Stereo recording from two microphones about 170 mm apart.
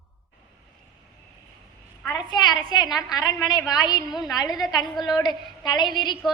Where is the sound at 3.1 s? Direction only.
20° left (ahead or behind).